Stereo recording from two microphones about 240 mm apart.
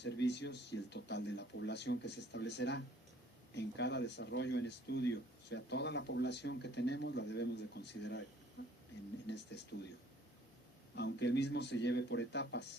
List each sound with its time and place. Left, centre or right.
0.0 s speech: left
10.9 s speech: left